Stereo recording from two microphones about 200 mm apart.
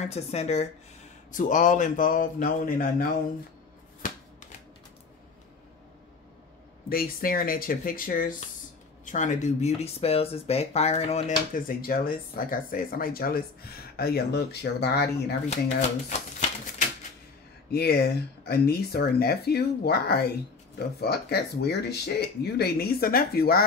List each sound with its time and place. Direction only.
0.0 s speech: 30° left (ahead or behind)
4.0 s shuffling cards: 40° left (ahead or behind)
6.9 s speech: 45° left (ahead or behind)
16.1 s a sound: 35° left (ahead or behind)
17.6 s speech: 50° left (ahead or behind)